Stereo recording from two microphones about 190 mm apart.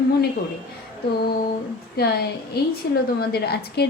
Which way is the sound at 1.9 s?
55° left (ahead or behind).